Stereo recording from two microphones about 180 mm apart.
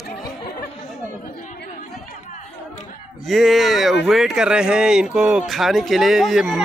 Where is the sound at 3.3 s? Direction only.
Centre (ahead or behind).